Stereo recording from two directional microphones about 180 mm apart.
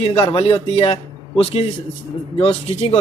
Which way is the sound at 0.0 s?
30° left (ahead or behind).